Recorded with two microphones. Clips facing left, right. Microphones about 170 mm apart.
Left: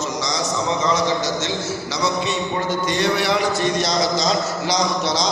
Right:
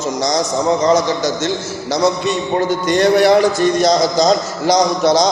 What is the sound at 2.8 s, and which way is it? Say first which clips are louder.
A man's voice: right 11 dB; 50° right (ahead or behind).